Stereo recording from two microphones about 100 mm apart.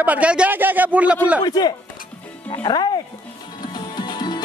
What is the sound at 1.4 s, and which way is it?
Speech, 45° left (ahead or behind).